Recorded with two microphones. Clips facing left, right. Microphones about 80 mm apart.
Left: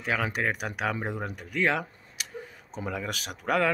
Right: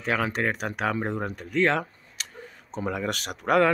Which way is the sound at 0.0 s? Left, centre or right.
Centre.